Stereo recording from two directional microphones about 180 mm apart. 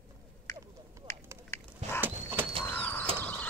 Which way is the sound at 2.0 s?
10° right (ahead or behind).